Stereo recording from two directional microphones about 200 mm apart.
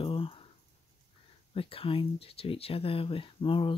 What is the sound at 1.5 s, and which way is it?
Speech, 30° left (ahead or behind).